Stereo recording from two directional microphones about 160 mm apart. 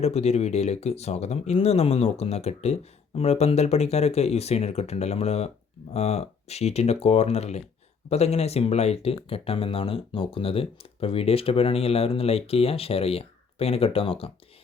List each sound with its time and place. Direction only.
0.0 s speech: 40° left (ahead or behind)